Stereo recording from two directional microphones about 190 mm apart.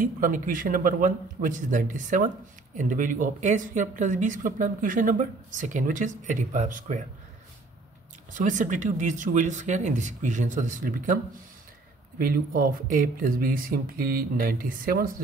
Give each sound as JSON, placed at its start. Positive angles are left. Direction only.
{"t": 0.0, "sound": "speech", "side_deg": -45}
{"t": 8.4, "sound": "speech", "side_deg": -40}
{"t": 12.2, "sound": "speech", "side_deg": -50}